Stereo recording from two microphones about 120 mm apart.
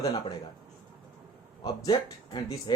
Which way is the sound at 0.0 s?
35° left (ahead or behind).